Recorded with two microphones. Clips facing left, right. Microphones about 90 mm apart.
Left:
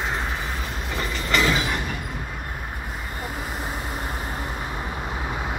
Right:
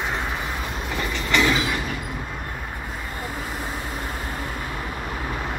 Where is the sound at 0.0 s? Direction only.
Centre (ahead or behind).